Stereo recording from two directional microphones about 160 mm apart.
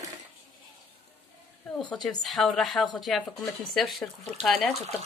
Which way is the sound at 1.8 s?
5° left (ahead or behind).